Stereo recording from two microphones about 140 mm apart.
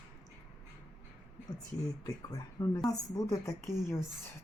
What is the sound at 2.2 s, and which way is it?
Speech, 25° left (ahead or behind).